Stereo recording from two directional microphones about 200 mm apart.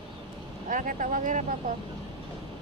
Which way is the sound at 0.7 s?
40° right (ahead or behind).